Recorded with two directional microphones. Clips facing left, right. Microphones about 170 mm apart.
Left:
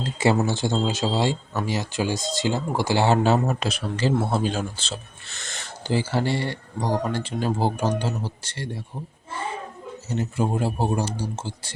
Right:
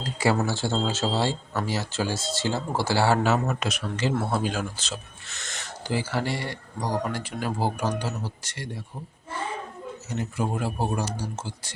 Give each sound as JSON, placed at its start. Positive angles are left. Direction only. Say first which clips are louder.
{"t": 0.0, "sound": "speech", "louder": "left 3 dB", "side_deg": 25}
{"t": 10.1, "sound": "speech", "louder": "left 4 dB", "side_deg": 30}